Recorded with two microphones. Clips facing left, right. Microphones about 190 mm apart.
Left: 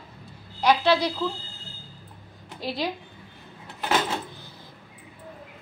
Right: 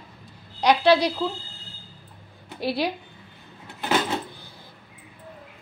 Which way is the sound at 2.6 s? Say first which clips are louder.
Right 4 dB; 10° right (ahead or behind).